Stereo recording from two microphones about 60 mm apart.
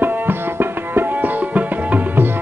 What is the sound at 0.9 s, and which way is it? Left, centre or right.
Tabla, right.